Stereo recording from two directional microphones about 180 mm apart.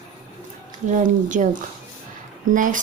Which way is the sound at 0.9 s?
45° right (ahead or behind).